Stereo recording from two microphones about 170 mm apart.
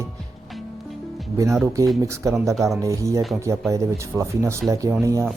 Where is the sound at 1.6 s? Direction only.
20° right (ahead or behind).